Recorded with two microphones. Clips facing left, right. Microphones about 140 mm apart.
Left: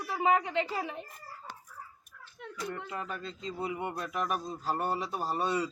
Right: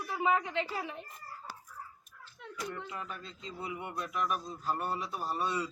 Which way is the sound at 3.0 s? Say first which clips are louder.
Left 6 dB; 35° left (ahead or behind).